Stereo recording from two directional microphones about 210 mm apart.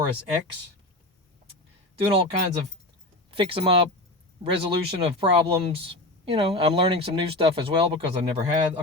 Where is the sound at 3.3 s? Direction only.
25° right (ahead or behind).